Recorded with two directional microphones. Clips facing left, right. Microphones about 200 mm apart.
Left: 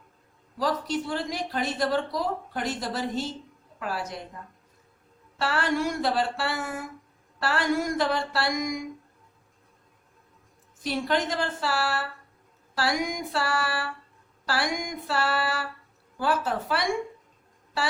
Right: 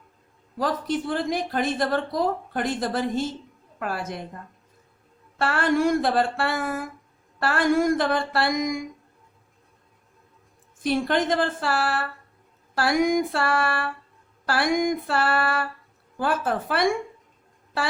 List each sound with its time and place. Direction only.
0.5 s a woman's voice: 50° right (ahead or behind)
5.4 s a woman's voice: 50° right (ahead or behind)
10.8 s a woman's voice: 50° right (ahead or behind)